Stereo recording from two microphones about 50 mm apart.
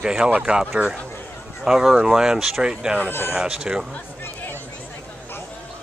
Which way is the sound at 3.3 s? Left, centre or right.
Centre.